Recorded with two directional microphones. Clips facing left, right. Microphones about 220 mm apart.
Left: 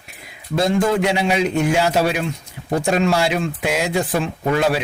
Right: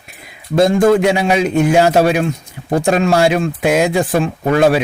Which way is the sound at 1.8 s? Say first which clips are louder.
Right 6 dB; 50° right (ahead or behind).